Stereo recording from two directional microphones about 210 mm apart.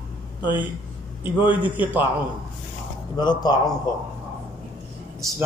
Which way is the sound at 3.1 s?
20° left (ahead or behind).